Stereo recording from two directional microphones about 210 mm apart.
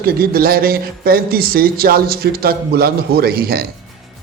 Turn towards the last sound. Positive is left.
turn(degrees=-45)  # may be behind; listen again after turning